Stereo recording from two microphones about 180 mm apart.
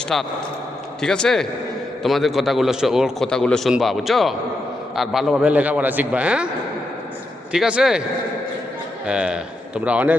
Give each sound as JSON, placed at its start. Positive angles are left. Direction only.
{"t": 0.1, "sound": "a man's voice", "side_deg": 0}
{"t": 7.5, "sound": "a man's voice", "side_deg": -5}
{"t": 9.0, "sound": "a man's voice", "side_deg": -5}